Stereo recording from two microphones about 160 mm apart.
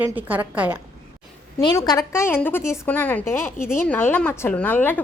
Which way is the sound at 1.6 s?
25° left (ahead or behind).